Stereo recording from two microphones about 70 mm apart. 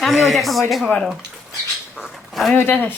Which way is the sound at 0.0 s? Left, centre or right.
Centre.